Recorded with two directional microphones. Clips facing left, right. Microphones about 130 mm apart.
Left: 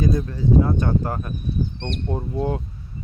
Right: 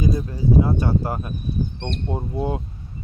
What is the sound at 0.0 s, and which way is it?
Speech, 10° right (ahead or behind).